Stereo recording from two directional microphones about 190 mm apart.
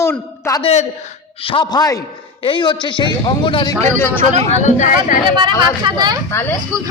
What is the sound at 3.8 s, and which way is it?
Speech, 10° left (ahead or behind).